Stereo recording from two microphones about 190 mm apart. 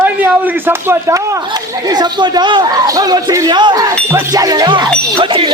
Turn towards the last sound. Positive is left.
turn(degrees=-25)  # may be behind; listen again after turning